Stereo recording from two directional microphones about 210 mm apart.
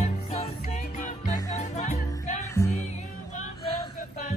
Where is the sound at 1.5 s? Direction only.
35° left (ahead or behind).